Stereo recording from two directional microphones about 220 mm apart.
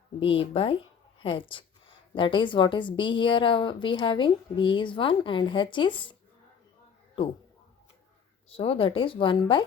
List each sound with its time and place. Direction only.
0.2 s a woman's voice: 25° left (ahead or behind)
8.4 s a woman's voice: 25° left (ahead or behind)